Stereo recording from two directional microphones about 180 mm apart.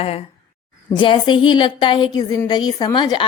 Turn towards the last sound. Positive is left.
turn(degrees=25)  # may be behind; listen again after turning